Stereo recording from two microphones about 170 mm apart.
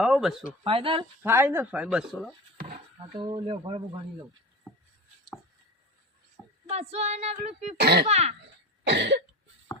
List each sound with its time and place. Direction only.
0.0 s speech: centre (ahead or behind)
0.6 s female singing: 30° right (ahead or behind)
1.2 s speech: 15° right (ahead or behind)
2.7 s speech: 25° right (ahead or behind)
4.7 s a sound: centre (ahead or behind)
6.7 s female singing: 40° right (ahead or behind)
7.8 s speech: 75° right (ahead or behind)
8.0 s female singing: 40° right (ahead or behind)
8.9 s cough: 90° right